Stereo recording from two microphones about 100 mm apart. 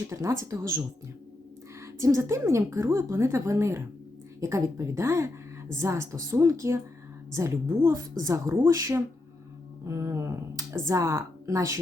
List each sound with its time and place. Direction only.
0.1 s speech: 30° right (ahead or behind)
1.8 s a woman's voice: 30° right (ahead or behind)